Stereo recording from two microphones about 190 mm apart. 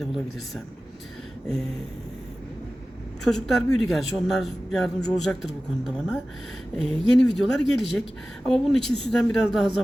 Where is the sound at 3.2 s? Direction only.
Centre (ahead or behind).